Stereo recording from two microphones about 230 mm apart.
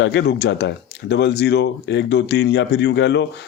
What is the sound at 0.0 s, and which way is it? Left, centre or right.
Speech, left.